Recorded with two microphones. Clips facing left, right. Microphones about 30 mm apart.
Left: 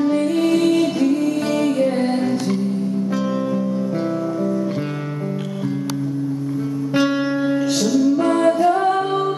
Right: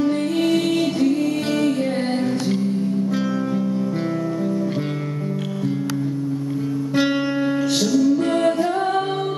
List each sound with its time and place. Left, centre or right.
0.0 s music: centre
7.4 s music: centre
8.7 s music: centre